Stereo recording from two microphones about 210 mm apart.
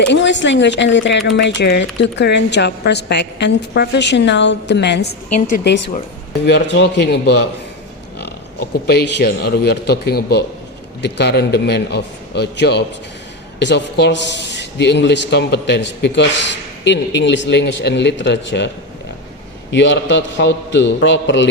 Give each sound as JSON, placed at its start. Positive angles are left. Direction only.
{"t": 0.1, "sound": "a man's voice", "side_deg": 60}
{"t": 8.9, "sound": "a man's voice", "side_deg": 50}
{"t": 19.7, "sound": "speech", "side_deg": 55}